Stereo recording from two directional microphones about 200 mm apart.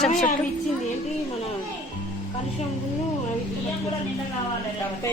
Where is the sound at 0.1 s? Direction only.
40° left (ahead or behind).